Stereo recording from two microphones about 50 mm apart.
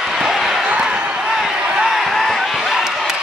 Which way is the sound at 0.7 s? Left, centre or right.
Centre.